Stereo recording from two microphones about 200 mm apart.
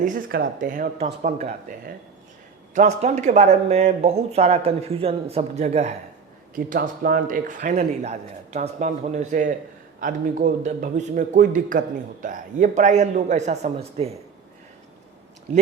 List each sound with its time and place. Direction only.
0.0 s speech: 45° right (ahead or behind)
2.7 s speech: 35° right (ahead or behind)
6.6 s speech: 45° right (ahead or behind)